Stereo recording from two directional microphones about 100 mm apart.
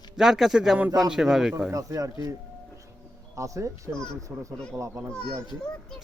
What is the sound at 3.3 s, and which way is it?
Speech, 30° right (ahead or behind).